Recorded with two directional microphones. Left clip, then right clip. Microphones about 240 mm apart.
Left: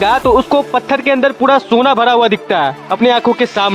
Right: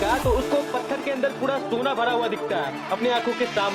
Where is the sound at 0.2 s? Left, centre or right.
Left.